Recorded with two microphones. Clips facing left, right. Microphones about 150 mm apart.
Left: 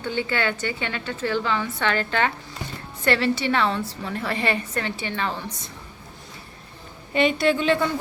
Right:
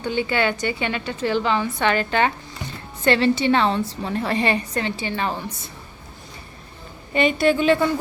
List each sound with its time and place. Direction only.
0.0 s a woman's voice: 15° right (ahead or behind)
7.1 s a woman's voice: centre (ahead or behind)